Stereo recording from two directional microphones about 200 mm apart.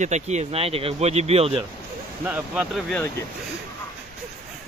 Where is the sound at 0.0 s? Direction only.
35° right (ahead or behind).